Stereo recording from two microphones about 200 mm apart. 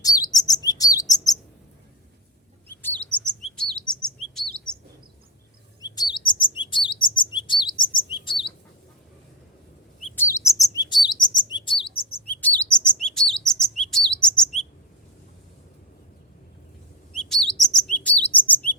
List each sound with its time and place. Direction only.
0.0 s chirp: 20° left (ahead or behind)
2.6 s chirp: 10° left (ahead or behind)
5.8 s chirp: 20° left (ahead or behind)
10.2 s chirp: 15° left (ahead or behind)
12.3 s chirp: 10° left (ahead or behind)
17.2 s chirp: 5° left (ahead or behind)